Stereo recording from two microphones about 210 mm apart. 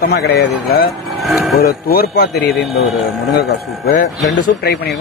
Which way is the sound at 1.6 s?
45° left (ahead or behind).